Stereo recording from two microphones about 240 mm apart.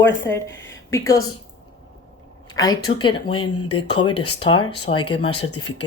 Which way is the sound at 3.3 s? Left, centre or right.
Left.